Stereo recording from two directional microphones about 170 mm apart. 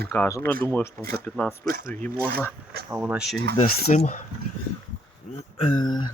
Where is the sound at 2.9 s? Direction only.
10° right (ahead or behind).